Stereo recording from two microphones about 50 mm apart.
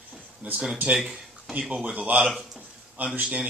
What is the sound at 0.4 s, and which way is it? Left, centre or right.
Speech, right.